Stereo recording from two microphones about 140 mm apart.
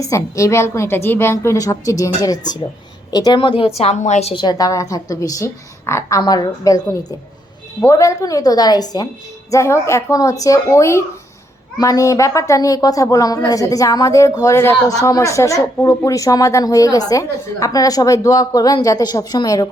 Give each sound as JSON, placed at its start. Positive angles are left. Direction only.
{"t": 0.0, "sound": "speech", "side_deg": 25}
{"t": 3.8, "sound": "a woman's voice", "side_deg": 55}
{"t": 4.4, "sound": "speech", "side_deg": 30}